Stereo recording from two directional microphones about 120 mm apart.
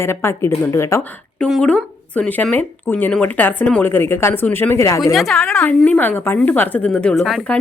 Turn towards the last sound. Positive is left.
turn(degrees=0)  # may be behind; listen again after turning